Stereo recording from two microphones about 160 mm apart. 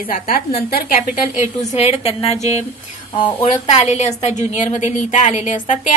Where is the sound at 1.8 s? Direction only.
40° left (ahead or behind).